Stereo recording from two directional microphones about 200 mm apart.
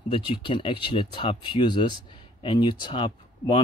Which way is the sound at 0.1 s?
25° left (ahead or behind).